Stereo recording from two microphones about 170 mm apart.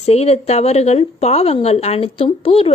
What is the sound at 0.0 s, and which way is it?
A woman's voice, 40° left (ahead or behind).